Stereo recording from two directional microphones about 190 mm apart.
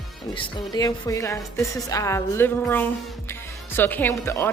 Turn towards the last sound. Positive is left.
turn(degrees=15)  # may be behind; listen again after turning